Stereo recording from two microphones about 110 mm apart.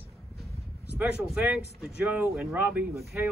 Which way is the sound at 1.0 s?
10° right (ahead or behind).